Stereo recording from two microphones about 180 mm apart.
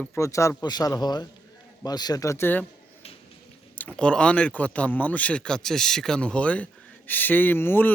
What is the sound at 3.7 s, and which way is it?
Speech, 5° left (ahead or behind).